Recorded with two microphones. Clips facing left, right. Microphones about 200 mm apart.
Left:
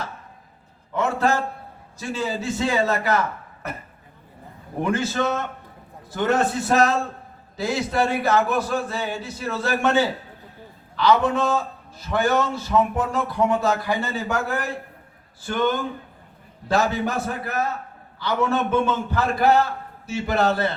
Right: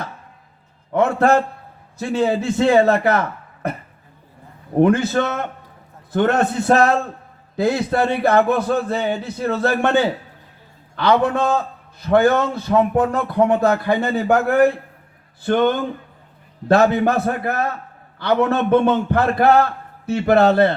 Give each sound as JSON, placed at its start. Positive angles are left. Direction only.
{"t": 0.9, "sound": "a man's voice", "side_deg": -60}
{"t": 4.8, "sound": "a man's voice", "side_deg": -60}